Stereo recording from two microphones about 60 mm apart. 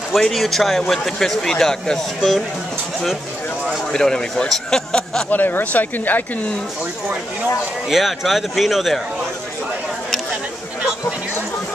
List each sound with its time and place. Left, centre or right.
0.2 s a man's voice: centre
3.9 s speech: centre
5.3 s speech: left
7.9 s a man's voice: centre